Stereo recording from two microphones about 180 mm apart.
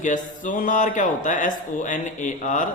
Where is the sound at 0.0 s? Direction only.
45° left (ahead or behind).